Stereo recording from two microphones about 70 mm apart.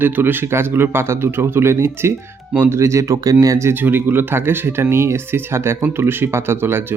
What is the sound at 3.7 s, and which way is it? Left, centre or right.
Speech, right.